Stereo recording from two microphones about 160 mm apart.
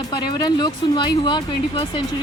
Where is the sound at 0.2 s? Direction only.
25° left (ahead or behind).